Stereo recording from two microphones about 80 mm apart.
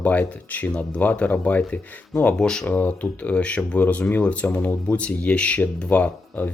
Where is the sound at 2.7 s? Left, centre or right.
Left.